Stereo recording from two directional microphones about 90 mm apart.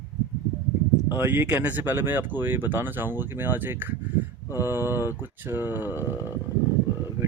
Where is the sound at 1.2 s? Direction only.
25° right (ahead or behind).